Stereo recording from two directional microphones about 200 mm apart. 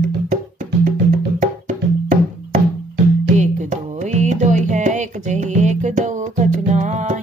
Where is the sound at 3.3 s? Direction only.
35° right (ahead or behind).